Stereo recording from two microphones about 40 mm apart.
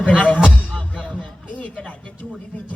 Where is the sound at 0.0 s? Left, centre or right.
Left.